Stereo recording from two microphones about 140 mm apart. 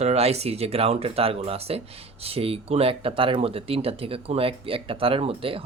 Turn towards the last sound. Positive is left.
turn(degrees=-40)  # may be behind; listen again after turning